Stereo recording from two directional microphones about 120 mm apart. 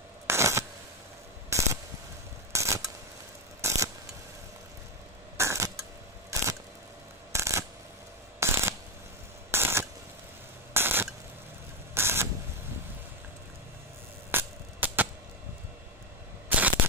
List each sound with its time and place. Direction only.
0.3 s camera: 25° right (ahead or behind)
1.5 s mechanisms: 25° right (ahead or behind)
2.5 s a sound: 25° right (ahead or behind)
5.4 s creak: 25° right (ahead or behind)
6.3 s a sound: 25° right (ahead or behind)
8.4 s shuffling cards: 20° right (ahead or behind)
9.5 s mechanisms: 20° right (ahead or behind)
11.9 s camera: 20° right (ahead or behind)
14.3 s a sound: 15° right (ahead or behind)
16.4 s camera: 15° right (ahead or behind)